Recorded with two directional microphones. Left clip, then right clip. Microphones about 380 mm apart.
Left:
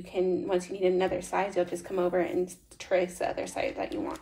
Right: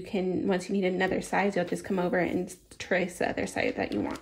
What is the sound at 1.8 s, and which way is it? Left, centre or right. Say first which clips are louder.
Speech: even; right.